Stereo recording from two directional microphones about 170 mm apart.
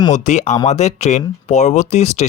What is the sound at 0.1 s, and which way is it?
Speech, 45° left (ahead or behind).